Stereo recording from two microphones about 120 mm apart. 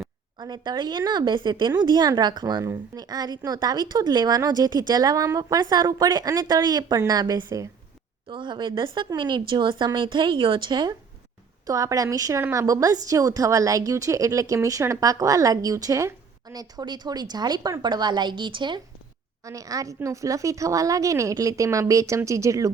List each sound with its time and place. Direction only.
0.3 s speech: 35° right (ahead or behind)
8.3 s speech: 40° right (ahead or behind)
11.6 s a woman's voice: 30° right (ahead or behind)
19.5 s a woman's voice: 30° right (ahead or behind)